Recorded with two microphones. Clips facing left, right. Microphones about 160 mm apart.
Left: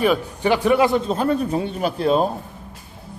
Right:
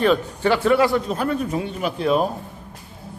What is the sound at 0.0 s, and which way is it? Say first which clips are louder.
A man's voice: right 1 dB; 15° left (ahead or behind).